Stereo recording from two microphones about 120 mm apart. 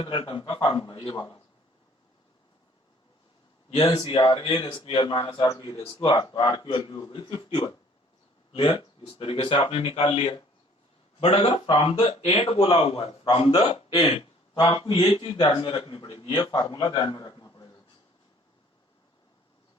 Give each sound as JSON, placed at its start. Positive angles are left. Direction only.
{"t": 0.0, "sound": "speech", "side_deg": 45}
{"t": 3.7, "sound": "speech", "side_deg": 55}
{"t": 3.9, "sound": "a man's voice", "side_deg": 35}